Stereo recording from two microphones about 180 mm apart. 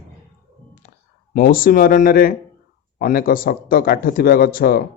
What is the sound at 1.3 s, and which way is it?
Speech, 50° left (ahead or behind).